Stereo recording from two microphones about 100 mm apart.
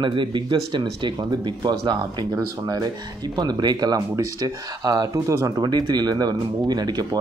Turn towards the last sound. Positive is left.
turn(degrees=-45)  # may be behind; listen again after turning